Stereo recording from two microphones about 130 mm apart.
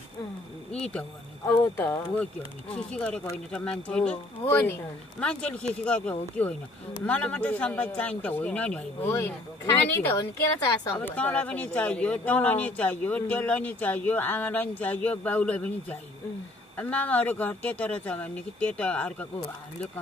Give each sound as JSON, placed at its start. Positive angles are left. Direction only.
{"t": 0.7, "sound": "speech", "side_deg": 5}
{"t": 1.4, "sound": "speech", "side_deg": 20}
{"t": 4.5, "sound": "speech", "side_deg": 20}
{"t": 5.2, "sound": "speech", "side_deg": 10}
{"t": 9.1, "sound": "speech", "side_deg": 20}